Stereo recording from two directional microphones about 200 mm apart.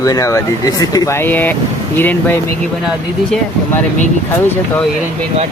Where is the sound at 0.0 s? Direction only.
15° left (ahead or behind).